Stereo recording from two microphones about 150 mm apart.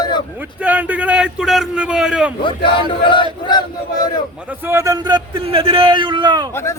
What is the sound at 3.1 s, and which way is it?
Chant, 30° left (ahead or behind).